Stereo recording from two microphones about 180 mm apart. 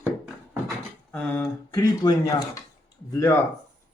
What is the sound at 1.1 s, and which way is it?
Speech, 10° left (ahead or behind).